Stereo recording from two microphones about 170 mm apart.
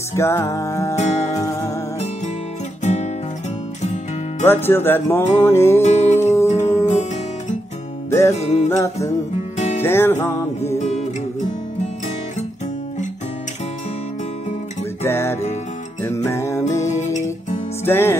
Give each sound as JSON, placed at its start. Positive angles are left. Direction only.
{"t": 0.1, "sound": "music", "side_deg": 15}
{"t": 0.9, "sound": "music", "side_deg": 40}
{"t": 1.4, "sound": "music", "side_deg": 20}
{"t": 2.8, "sound": "guitar", "side_deg": 45}
{"t": 3.8, "sound": "music", "side_deg": 45}
{"t": 4.5, "sound": "music", "side_deg": 15}
{"t": 5.8, "sound": "music", "side_deg": 40}
{"t": 6.9, "sound": "guitar", "side_deg": 40}
{"t": 8.1, "sound": "music", "side_deg": 15}
{"t": 10.7, "sound": "music", "side_deg": 40}
{"t": 15.0, "sound": "music", "side_deg": 15}
{"t": 17.0, "sound": "music", "side_deg": 45}
{"t": 17.8, "sound": "music", "side_deg": 15}